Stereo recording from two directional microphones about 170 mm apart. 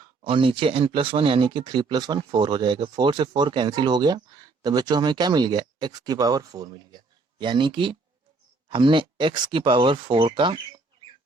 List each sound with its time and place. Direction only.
0.0 s speech: 30° right (ahead or behind)